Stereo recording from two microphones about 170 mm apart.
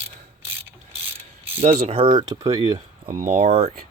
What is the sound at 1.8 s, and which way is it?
Speech, 35° right (ahead or behind).